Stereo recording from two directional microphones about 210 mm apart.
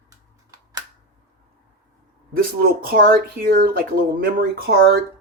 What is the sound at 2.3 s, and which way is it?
Speech, 45° right (ahead or behind).